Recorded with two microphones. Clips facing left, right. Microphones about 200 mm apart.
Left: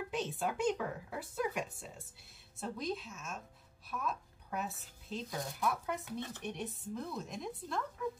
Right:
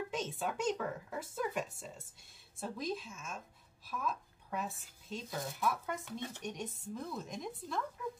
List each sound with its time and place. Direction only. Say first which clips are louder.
0.1 s speech: left 1 dB; 5° left (ahead or behind)